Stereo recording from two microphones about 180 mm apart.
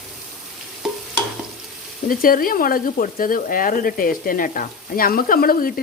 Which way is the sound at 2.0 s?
50° left (ahead or behind).